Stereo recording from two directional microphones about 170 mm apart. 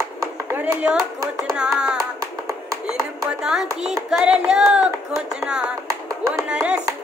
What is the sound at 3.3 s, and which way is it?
Speech, 5° right (ahead or behind).